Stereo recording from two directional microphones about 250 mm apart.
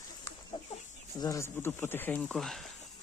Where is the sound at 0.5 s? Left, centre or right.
Centre.